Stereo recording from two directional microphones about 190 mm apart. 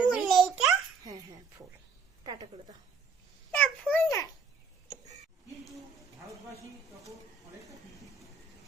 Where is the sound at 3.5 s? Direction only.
10° left (ahead or behind).